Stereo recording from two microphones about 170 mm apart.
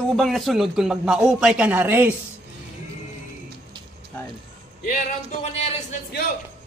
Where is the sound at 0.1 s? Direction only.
Centre (ahead or behind).